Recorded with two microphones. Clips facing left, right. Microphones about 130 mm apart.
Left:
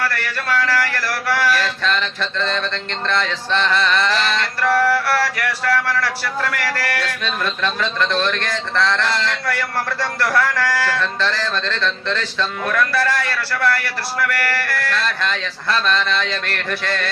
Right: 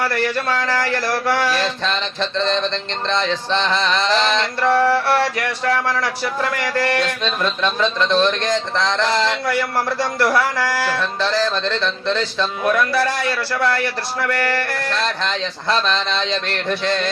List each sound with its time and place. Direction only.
0.0 s mantra: 15° right (ahead or behind)